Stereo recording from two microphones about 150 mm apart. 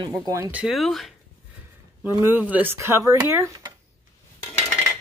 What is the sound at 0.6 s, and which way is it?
Speech, centre (ahead or behind).